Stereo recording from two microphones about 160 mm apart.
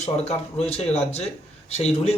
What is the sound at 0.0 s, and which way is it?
Speech, 40° left (ahead or behind).